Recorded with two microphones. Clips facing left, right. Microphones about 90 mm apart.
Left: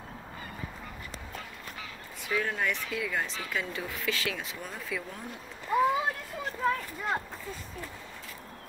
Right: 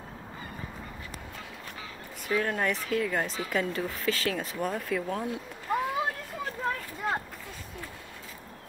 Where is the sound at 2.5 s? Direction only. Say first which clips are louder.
Right 4 dB; 40° right (ahead or behind).